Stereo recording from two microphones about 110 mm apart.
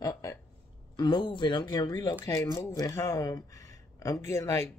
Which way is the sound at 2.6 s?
25° left (ahead or behind).